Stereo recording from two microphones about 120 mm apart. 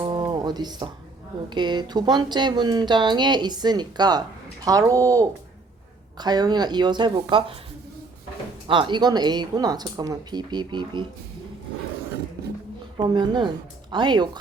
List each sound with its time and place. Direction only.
0.0 s a sound: 40° right (ahead or behind)
1.5 s speech: 40° right (ahead or behind)
8.6 s speech: 45° right (ahead or behind)
13.0 s speech: 40° right (ahead or behind)